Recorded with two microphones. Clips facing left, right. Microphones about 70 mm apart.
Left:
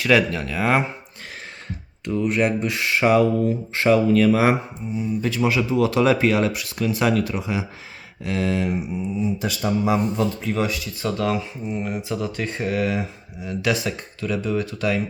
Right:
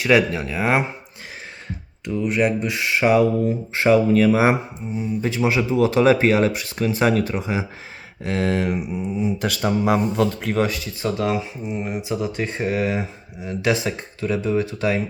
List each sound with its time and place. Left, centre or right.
0.0 s speech: centre
2.0 s speech: centre
3.4 s speech: right
8.2 s speech: right
10.6 s speech: right
11.0 s speech: centre